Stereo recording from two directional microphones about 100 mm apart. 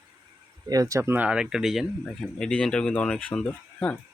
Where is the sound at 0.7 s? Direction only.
35° right (ahead or behind).